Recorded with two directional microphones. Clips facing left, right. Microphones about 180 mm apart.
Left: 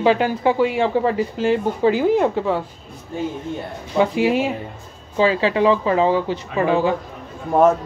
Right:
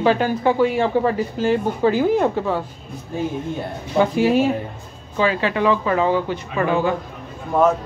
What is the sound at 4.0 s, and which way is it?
Speech, 20° left (ahead or behind).